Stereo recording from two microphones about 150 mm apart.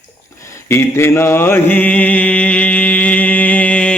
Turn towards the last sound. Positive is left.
turn(degrees=10)  # may be behind; listen again after turning